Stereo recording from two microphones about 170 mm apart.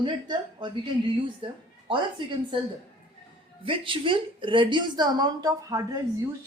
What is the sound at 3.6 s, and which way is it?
A woman's voice, 30° right (ahead or behind).